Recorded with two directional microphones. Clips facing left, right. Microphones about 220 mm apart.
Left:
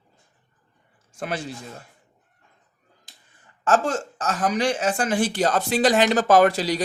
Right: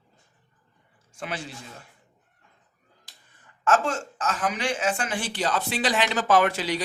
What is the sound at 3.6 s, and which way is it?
Speech, 35° left (ahead or behind).